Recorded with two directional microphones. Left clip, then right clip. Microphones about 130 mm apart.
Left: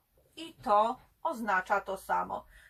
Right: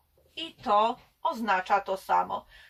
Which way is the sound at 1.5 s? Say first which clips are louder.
Right 4 dB; 35° right (ahead or behind).